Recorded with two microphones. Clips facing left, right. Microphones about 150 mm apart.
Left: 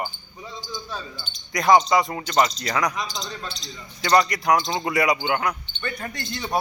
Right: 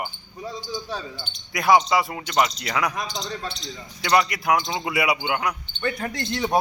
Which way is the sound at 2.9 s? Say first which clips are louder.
Right 1 dB; 55° right (ahead or behind).